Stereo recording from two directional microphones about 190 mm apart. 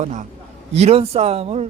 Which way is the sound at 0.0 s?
40° right (ahead or behind).